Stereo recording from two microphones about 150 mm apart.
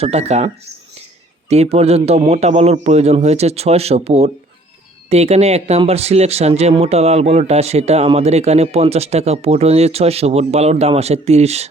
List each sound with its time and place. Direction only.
0.0 s speech: 45° right (ahead or behind)